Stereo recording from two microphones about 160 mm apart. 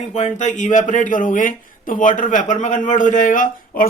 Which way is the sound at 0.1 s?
45° left (ahead or behind).